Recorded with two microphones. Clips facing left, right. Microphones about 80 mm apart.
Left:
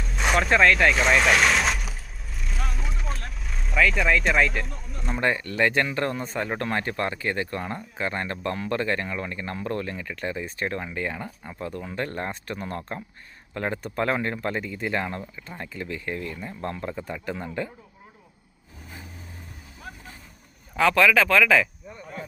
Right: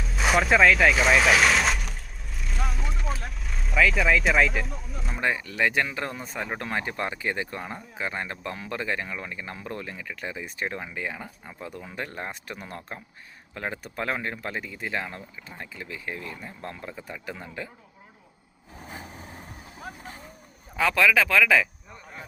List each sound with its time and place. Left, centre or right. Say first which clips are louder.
0.0 s speech: even; centre
18.9 s vehicle: right 3 dB; right
20.7 s speech: left 2 dB; centre